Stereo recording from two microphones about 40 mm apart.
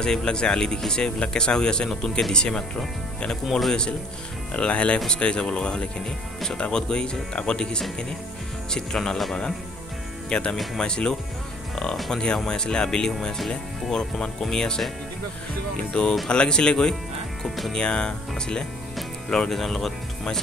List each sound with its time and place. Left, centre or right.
0.0 s speech: centre
4.6 s speech: left
10.3 s speech: left
11.7 s music: centre
12.1 s speech: left
15.9 s speech: left
19.2 s speech: centre
19.5 s speech: centre